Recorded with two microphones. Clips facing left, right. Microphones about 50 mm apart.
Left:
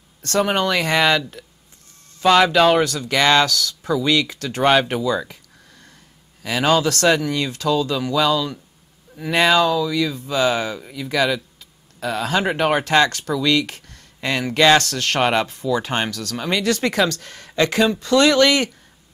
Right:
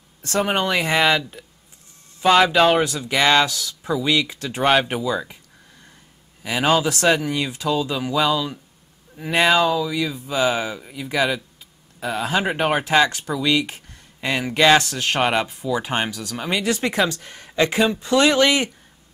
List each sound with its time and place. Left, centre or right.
0.2 s speech: right
2.1 s speech: centre
2.8 s speech: centre
4.8 s a sound: centre
6.4 s speech: centre